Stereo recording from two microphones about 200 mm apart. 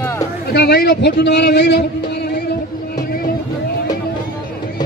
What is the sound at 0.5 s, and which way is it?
Speech, 50° left (ahead or behind).